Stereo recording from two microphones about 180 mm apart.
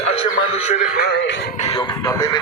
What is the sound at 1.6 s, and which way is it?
Speech, 25° left (ahead or behind).